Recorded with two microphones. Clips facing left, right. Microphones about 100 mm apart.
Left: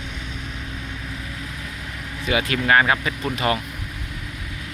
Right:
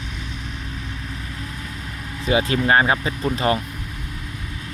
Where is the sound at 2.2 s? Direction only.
30° right (ahead or behind).